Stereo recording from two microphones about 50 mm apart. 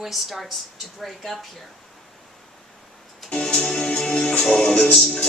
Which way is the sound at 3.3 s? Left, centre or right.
Centre.